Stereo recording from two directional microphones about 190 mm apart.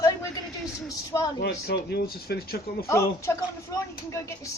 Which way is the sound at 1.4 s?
55° left (ahead or behind).